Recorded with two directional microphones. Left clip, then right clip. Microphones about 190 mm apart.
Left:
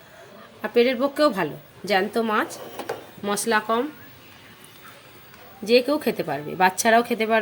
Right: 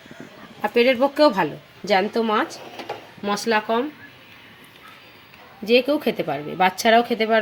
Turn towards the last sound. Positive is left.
turn(degrees=-25)  # may be behind; listen again after turning